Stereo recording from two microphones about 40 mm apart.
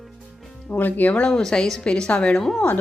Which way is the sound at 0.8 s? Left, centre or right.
Left.